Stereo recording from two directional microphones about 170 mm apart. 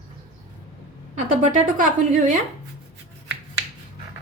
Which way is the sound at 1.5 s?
50° right (ahead or behind).